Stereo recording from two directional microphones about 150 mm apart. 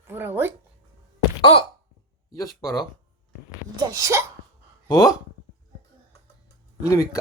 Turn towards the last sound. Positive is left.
turn(degrees=25)  # may be behind; listen again after turning